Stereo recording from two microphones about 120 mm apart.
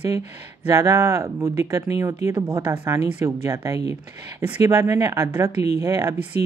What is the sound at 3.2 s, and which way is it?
Speech, 25° right (ahead or behind).